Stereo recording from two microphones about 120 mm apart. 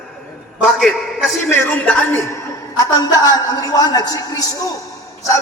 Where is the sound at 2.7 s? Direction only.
35° left (ahead or behind).